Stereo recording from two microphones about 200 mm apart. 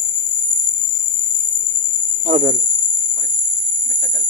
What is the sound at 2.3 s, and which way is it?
Speech, 35° right (ahead or behind).